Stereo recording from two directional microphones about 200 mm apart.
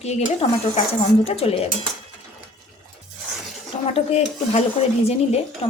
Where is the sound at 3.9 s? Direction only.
30° left (ahead or behind).